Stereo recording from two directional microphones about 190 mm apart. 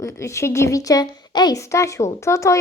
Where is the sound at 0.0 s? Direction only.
15° left (ahead or behind).